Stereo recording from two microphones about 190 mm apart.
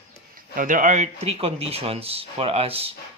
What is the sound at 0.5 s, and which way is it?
Speech, 45° right (ahead or behind).